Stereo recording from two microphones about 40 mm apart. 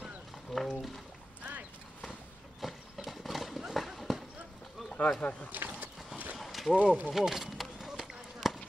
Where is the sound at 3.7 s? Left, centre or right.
Centre.